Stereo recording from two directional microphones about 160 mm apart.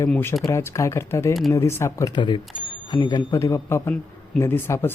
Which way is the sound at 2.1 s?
30° left (ahead or behind).